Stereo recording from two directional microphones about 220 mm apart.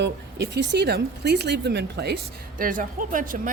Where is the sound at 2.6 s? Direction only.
40° right (ahead or behind).